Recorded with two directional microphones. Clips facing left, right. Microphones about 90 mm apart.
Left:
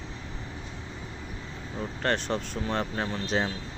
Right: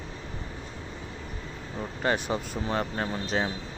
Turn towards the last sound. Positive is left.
turn(degrees=-5)  # may be behind; listen again after turning